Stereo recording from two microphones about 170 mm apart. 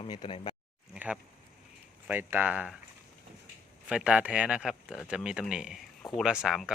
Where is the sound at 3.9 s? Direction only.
5° right (ahead or behind).